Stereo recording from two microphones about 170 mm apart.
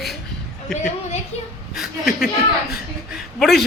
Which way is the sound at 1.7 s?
Centre (ahead or behind).